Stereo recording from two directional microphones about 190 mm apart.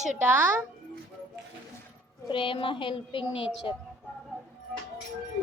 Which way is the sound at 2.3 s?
25° left (ahead or behind).